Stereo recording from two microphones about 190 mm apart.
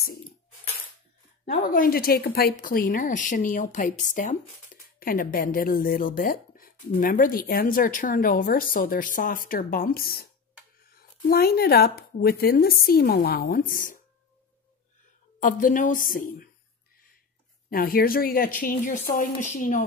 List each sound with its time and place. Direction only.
1.5 s speech: 45° left (ahead or behind)
11.2 s speech: 55° left (ahead or behind)
15.4 s speech: 45° left (ahead or behind)
17.6 s speech: 50° left (ahead or behind)